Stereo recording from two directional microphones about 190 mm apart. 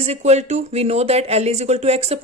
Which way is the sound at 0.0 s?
35° right (ahead or behind).